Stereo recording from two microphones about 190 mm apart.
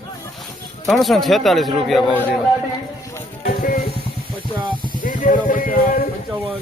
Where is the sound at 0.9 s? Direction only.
Centre (ahead or behind).